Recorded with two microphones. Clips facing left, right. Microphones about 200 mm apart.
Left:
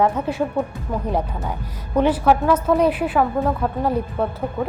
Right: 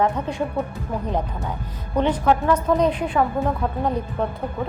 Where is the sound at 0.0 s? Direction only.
5° left (ahead or behind).